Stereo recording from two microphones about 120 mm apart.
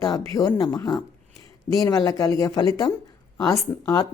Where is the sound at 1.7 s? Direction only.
30° left (ahead or behind).